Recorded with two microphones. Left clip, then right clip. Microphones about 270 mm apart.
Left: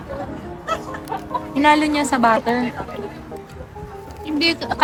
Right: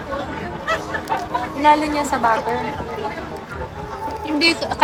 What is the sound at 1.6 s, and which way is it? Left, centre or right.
Speech, left.